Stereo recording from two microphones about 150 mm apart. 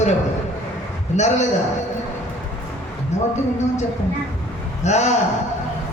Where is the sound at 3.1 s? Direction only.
50° left (ahead or behind).